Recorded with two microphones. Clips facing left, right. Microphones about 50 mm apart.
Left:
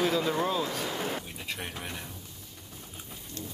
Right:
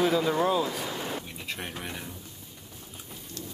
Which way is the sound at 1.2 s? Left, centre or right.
Centre.